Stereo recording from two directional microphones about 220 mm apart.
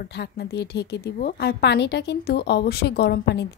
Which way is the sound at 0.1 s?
50° left (ahead or behind).